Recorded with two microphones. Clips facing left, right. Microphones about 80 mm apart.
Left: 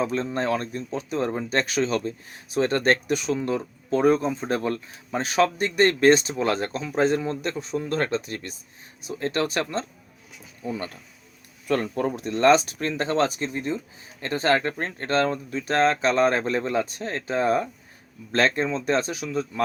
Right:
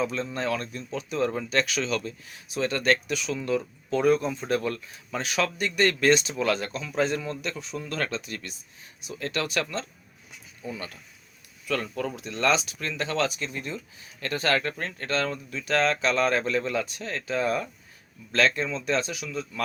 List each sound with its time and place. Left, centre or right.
0.0 s speech: left